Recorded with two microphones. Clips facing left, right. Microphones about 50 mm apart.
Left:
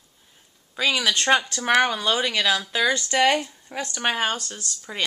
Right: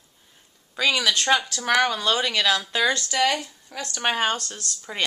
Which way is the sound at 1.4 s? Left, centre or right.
Left.